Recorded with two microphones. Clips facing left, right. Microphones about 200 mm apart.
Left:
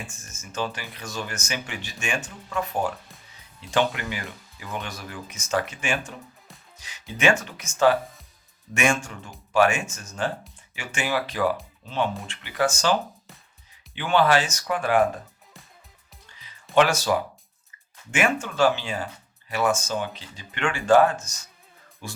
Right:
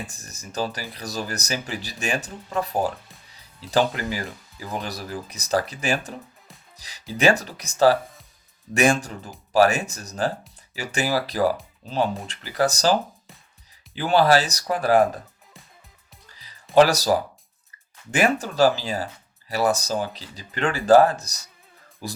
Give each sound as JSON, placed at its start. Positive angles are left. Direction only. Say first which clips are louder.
{"t": 0.0, "sound": "speech", "louder": "right 3 dB", "side_deg": -35}
{"t": 6.7, "sound": "music", "louder": "even", "side_deg": -35}
{"t": 7.1, "sound": "speech", "louder": "right 2 dB", "side_deg": -35}
{"t": 16.3, "sound": "music", "louder": "left 1 dB", "side_deg": -35}
{"t": 16.7, "sound": "speech", "louder": "right 4 dB", "side_deg": -35}